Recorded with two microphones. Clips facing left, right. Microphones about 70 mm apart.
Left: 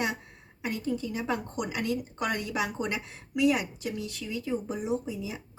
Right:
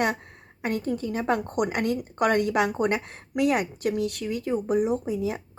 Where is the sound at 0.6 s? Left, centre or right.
Right.